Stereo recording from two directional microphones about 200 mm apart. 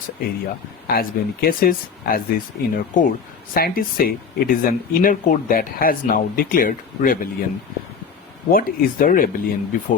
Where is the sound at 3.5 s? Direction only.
45° left (ahead or behind).